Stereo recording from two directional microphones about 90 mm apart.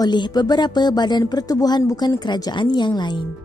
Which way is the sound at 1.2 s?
45° left (ahead or behind).